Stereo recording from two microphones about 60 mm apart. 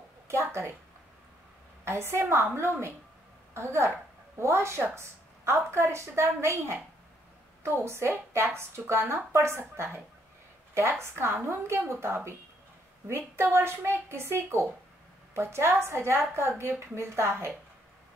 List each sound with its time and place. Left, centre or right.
0.3 s a woman's voice: right
1.9 s a woman's voice: right